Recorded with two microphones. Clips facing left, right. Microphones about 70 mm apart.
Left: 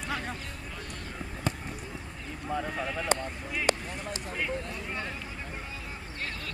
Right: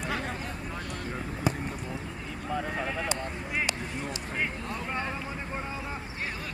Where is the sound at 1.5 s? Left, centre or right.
Centre.